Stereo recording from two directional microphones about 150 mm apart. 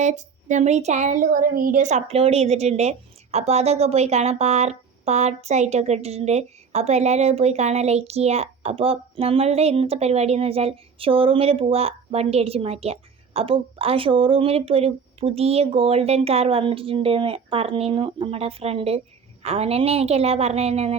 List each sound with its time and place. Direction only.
0.0 s speech: 50° right (ahead or behind)